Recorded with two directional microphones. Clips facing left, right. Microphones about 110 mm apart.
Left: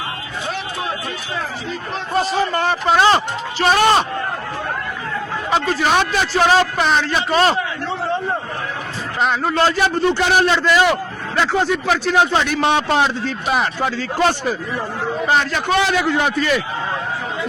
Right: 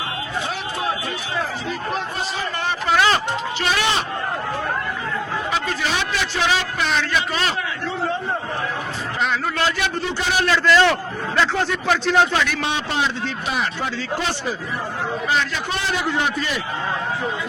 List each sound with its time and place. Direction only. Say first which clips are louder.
2.5 s a man's voice: left 6 dB; 45° left (ahead or behind)
2.9 s a man's voice: left 4 dB; 30° left (ahead or behind)
3.6 s a man's voice: left 9 dB; 45° left (ahead or behind)
5.8 s a man's voice: left 6 dB; 50° left (ahead or behind)
9.2 s a man's voice: left 5 dB; 25° left (ahead or behind)
10.4 s speech: right 3 dB; 20° left (ahead or behind); by 12.2 s 5° left (ahead or behind)
12.3 s a man's voice: left 3 dB; 30° left (ahead or behind)
12.6 s a man's voice: left 7 dB; 55° left (ahead or behind)
15.7 s a man's voice: left 7 dB; 90° left